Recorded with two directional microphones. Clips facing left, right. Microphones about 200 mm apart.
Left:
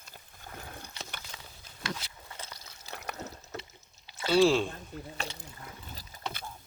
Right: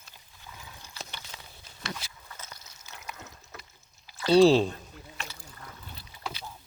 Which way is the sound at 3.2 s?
40° left (ahead or behind).